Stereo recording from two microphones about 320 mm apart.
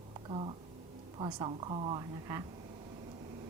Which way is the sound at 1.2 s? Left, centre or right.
Centre.